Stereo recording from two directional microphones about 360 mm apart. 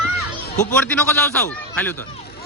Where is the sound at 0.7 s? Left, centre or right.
Centre.